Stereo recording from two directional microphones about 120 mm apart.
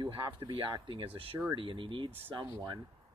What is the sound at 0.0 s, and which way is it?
Speech, 40° right (ahead or behind).